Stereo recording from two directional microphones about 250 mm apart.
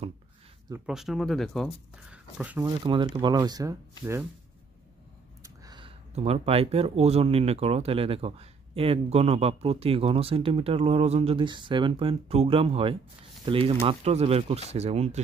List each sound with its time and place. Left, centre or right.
0.7 s speech: centre
5.4 s speech: centre